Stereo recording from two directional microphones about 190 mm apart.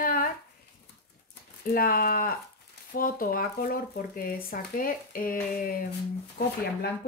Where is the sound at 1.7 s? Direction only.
50° left (ahead or behind).